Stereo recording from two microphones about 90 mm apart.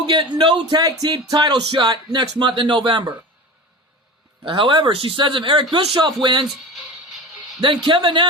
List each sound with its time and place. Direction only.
0.0 s speech: 60° right (ahead or behind)
4.4 s speech: 65° right (ahead or behind)
5.7 s speech: 90° right
7.6 s speech: 65° right (ahead or behind)